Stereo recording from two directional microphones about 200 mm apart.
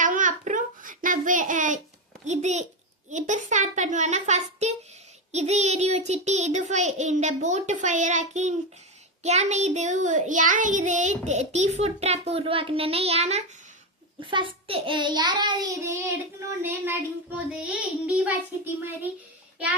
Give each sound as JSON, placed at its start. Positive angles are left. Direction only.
{"t": 0.0, "sound": "child singing", "side_deg": -40}
{"t": 2.2, "sound": "a sound", "side_deg": -35}
{"t": 3.1, "sound": "child singing", "side_deg": -35}
{"t": 14.2, "sound": "a child's voice", "side_deg": -25}
{"t": 16.6, "sound": "child singing", "side_deg": -10}